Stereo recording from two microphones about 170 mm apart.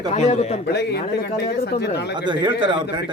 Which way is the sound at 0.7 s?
75° left (ahead or behind).